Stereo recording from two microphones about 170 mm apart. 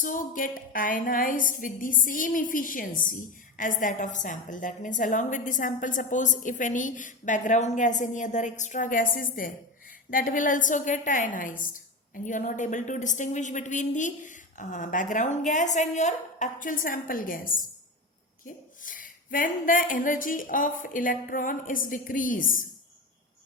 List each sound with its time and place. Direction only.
0.0 s a woman's voice: 55° left (ahead or behind)